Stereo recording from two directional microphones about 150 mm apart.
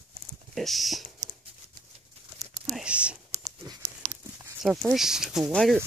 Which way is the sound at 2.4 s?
5° right (ahead or behind).